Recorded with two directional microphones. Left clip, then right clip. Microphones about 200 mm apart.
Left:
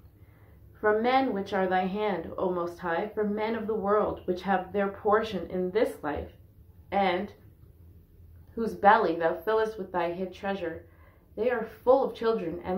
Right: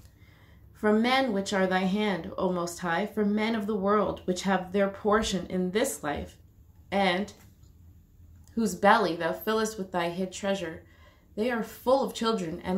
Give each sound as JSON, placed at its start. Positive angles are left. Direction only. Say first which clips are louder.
{"t": 0.7, "sound": "speech", "louder": "left 1 dB", "side_deg": -45}
{"t": 8.5, "sound": "speech", "louder": "left 1 dB", "side_deg": -45}